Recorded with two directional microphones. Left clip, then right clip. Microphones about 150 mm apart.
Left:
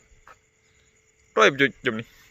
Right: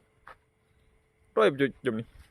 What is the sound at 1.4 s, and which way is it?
Speech, 5° right (ahead or behind).